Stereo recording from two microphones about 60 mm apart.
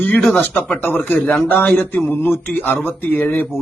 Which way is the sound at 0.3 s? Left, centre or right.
Left.